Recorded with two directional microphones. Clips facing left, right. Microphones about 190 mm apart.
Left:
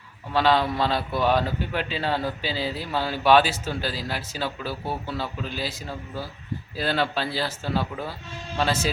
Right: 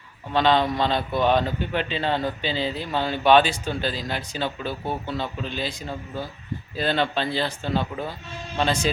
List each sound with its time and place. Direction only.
0.3 s speech: 5° left (ahead or behind)